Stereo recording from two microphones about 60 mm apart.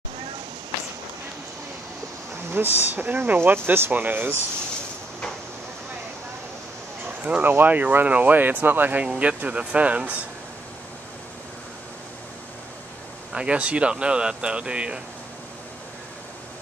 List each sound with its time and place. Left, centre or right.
2.5 s speech: right
7.2 s speech: right
9.0 s speech: centre
13.3 s speech: centre